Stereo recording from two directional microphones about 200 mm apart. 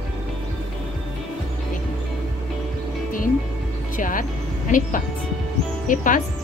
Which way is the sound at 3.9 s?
40° left (ahead or behind).